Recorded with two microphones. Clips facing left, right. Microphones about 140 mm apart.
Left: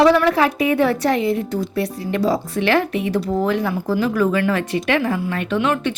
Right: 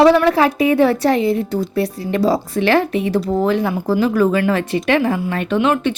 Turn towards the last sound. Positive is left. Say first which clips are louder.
# right 3 dB
turn(degrees=-25)  # may be behind; listen again after turning